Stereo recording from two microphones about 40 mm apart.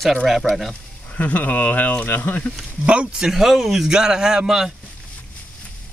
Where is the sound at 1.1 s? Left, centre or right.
Left.